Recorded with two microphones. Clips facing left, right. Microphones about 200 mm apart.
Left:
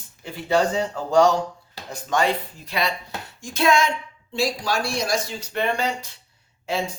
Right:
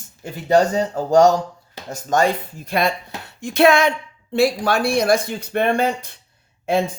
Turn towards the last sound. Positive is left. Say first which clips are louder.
# right 7 dB
turn(degrees=-55)  # may be behind; listen again after turning